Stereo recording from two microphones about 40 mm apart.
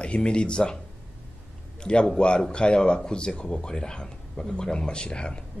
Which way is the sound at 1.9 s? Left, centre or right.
Left.